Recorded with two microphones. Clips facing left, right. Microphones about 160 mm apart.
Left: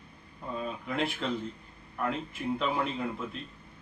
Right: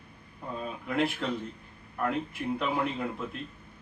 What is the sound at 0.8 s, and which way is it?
A man's voice, centre (ahead or behind).